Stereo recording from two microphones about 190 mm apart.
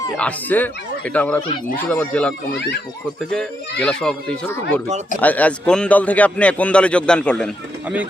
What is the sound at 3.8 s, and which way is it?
A man's voice, 5° left (ahead or behind).